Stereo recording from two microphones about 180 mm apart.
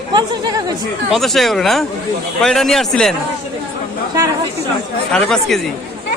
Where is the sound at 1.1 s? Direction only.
Centre (ahead or behind).